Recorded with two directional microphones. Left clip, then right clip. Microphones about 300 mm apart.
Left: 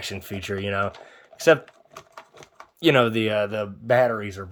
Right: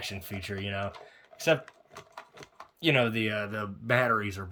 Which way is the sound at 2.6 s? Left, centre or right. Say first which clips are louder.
Left 7 dB; centre.